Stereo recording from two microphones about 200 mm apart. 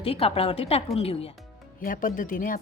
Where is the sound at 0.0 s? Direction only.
30° left (ahead or behind).